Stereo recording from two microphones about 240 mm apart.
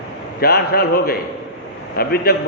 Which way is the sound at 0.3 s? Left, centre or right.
Left.